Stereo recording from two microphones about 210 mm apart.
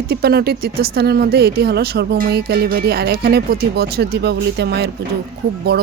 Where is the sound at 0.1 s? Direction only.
50° right (ahead or behind).